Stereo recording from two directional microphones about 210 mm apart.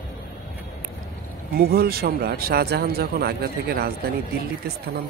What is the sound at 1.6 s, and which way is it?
Speech, 45° right (ahead or behind).